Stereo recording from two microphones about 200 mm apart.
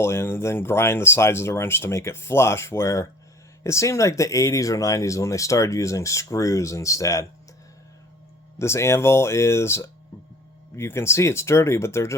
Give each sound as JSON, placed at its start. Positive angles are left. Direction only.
{"t": 0.0, "sound": "speech", "side_deg": 15}
{"t": 8.5, "sound": "speech", "side_deg": 15}